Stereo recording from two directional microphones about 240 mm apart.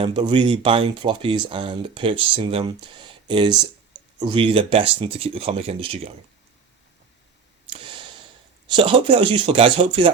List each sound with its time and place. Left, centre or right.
0.0 s speech: centre
7.7 s a sound: right
8.6 s speech: right